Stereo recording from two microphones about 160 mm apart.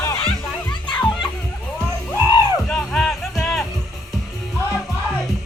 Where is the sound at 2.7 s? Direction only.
5° left (ahead or behind).